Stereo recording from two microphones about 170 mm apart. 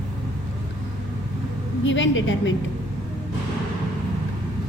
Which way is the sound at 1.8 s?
90° left.